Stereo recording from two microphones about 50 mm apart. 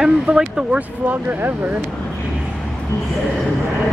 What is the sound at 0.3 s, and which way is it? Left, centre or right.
Speech, right.